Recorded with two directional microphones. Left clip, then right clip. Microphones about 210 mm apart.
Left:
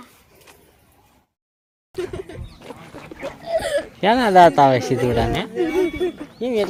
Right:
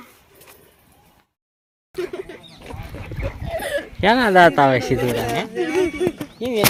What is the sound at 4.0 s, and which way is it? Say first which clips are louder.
Speech: left 1 dB; 5° right (ahead or behind).